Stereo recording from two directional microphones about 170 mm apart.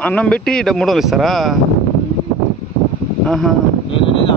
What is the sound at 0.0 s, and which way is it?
Speech, 5° left (ahead or behind).